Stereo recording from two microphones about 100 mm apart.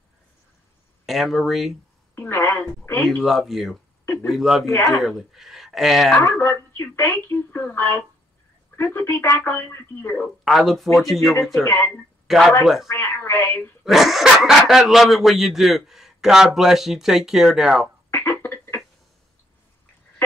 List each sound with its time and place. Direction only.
1.0 s speech: centre (ahead or behind)
2.1 s speech: 20° left (ahead or behind)
3.3 s speech: centre (ahead or behind)
4.0 s a sound: 25° left (ahead or behind)
4.3 s speech: 5° right (ahead or behind)
4.6 s speech: 30° left (ahead or behind)
5.0 s speech: centre (ahead or behind)
6.2 s speech: 25° left (ahead or behind)
10.4 s speech: centre (ahead or behind)
11.6 s speech: 25° left (ahead or behind)
12.3 s speech: 5° right (ahead or behind)
12.8 s speech: 25° left (ahead or behind)
13.8 s speech: centre (ahead or behind)
18.1 s a sound: 20° left (ahead or behind)